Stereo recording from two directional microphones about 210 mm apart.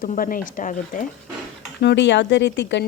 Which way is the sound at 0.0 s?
40° left (ahead or behind).